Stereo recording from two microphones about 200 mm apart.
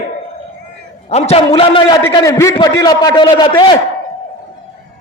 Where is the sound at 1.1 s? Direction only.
30° left (ahead or behind).